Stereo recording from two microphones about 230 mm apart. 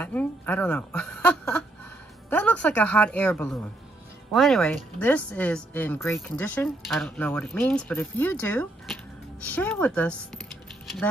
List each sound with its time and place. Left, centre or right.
0.0 s speech: centre